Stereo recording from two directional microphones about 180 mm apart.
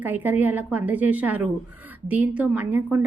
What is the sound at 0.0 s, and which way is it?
A woman's voice, 10° right (ahead or behind).